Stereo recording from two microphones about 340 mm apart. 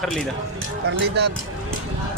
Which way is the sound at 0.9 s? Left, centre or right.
Right.